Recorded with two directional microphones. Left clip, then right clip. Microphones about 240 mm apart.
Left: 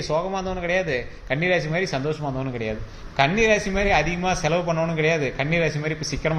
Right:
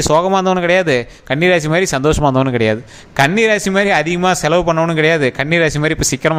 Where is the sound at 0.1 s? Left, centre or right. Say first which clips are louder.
Right 12 dB; right.